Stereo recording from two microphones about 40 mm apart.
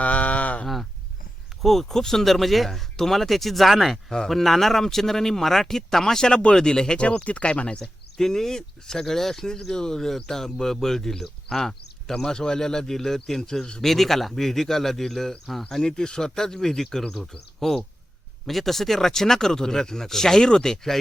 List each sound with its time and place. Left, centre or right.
0.0 s a sound: left
1.6 s speech: centre
7.1 s speech: left
7.8 s speech: centre
13.8 s speech: centre
15.7 s speech: centre